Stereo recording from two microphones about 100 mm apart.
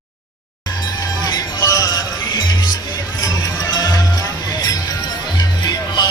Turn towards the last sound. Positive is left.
turn(degrees=45)  # may be behind; listen again after turning